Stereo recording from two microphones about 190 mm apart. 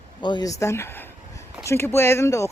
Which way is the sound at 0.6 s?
15° left (ahead or behind).